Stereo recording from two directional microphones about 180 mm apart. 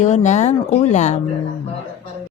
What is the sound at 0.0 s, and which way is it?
Speech, 40° left (ahead or behind).